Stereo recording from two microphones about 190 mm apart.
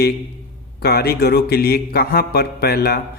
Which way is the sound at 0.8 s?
55° left (ahead or behind).